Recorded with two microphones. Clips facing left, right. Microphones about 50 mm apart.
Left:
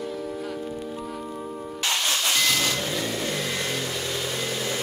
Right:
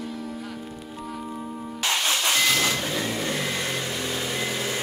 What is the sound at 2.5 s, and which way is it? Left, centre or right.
Vehicle, centre.